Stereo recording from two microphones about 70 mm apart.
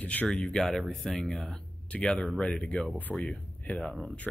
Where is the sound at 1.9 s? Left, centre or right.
Centre.